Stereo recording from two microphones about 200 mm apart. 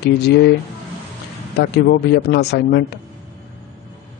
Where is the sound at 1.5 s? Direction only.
50° left (ahead or behind).